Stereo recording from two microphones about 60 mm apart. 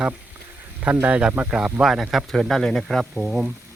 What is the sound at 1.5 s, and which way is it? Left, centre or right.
Speech, centre.